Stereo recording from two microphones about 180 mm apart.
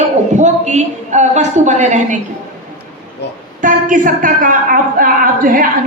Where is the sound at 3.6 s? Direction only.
45° right (ahead or behind).